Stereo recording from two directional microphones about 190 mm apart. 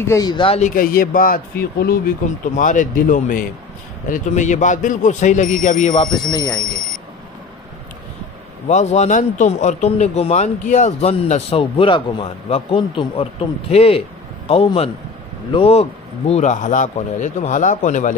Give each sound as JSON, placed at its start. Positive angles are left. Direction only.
{"t": 0.0, "sound": "speech", "side_deg": 15}
{"t": 0.6, "sound": "a man's voice", "side_deg": 45}
{"t": 6.3, "sound": "speech", "side_deg": 20}
{"t": 8.6, "sound": "a man's voice", "side_deg": 35}